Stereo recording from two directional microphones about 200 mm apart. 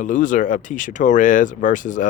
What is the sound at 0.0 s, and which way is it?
Speech, 40° left (ahead or behind).